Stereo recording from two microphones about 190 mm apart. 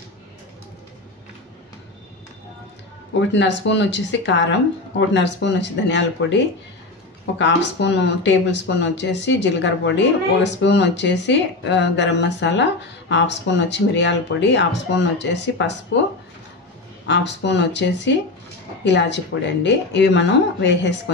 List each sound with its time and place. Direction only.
3.2 s speech: 70° left (ahead or behind)
17.1 s speech: 70° left (ahead or behind)